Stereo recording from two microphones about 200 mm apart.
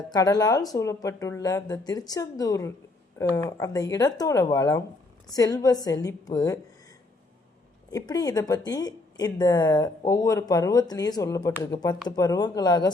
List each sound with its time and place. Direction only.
0.1 s speech: 20° left (ahead or behind)
7.9 s speech: 20° left (ahead or behind)